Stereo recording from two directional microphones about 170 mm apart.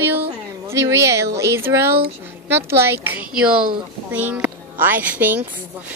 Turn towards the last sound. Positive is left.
turn(degrees=-10)  # may be behind; listen again after turning